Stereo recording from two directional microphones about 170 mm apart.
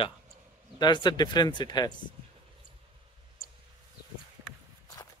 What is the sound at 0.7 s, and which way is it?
Speech, 25° left (ahead or behind).